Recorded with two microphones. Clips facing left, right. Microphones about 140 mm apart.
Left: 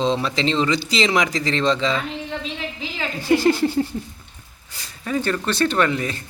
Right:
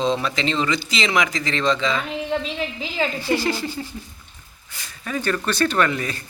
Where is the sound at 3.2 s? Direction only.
50° left (ahead or behind).